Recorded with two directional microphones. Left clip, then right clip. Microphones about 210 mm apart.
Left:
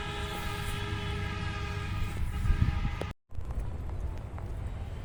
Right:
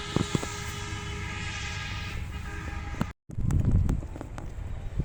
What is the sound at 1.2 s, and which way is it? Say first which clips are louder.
Music: right 3 dB; 30° left (ahead or behind).